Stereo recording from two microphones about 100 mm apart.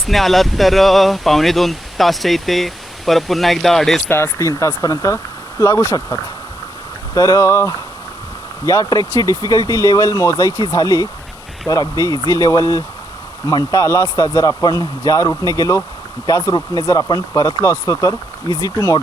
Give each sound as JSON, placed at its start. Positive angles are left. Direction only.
{"t": 0.0, "sound": "speech", "side_deg": 0}
{"t": 4.1, "sound": "speech", "side_deg": 30}